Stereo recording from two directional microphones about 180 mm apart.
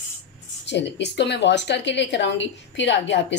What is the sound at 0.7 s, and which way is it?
A woman's voice, 75° left (ahead or behind).